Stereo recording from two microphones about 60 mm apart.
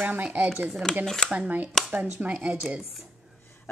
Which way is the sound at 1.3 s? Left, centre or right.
Right.